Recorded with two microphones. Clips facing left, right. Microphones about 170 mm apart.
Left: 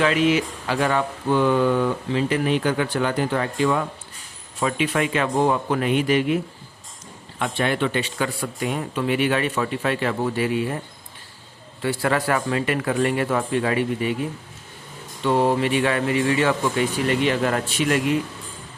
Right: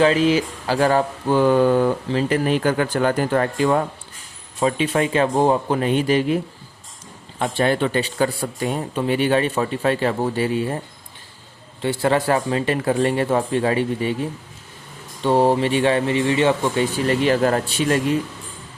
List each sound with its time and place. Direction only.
0.0 s speech: 35° right (ahead or behind)
4.6 s speech: 30° right (ahead or behind)
11.8 s speech: 25° right (ahead or behind)